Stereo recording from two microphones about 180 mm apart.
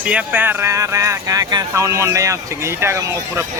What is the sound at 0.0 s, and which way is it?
A man's voice, 5° right (ahead or behind).